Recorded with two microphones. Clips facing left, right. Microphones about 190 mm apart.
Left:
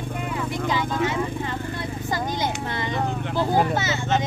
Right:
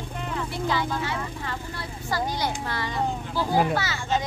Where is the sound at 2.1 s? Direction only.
20° left (ahead or behind).